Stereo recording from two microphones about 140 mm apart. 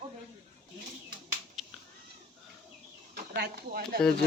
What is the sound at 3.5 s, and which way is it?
Speech, 90° right.